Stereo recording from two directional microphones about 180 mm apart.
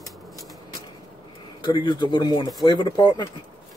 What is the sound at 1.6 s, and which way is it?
A man's voice, 25° left (ahead or behind).